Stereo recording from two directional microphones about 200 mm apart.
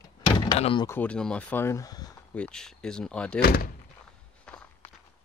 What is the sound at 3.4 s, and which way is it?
Speech, 50° left (ahead or behind).